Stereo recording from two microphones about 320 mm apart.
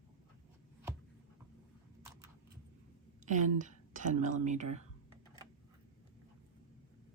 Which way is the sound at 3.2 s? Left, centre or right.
Right.